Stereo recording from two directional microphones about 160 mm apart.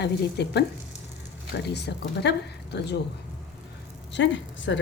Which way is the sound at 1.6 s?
90° left.